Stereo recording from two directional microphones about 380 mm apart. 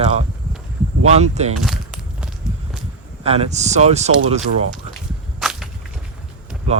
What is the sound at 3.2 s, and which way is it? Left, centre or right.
Speech, centre.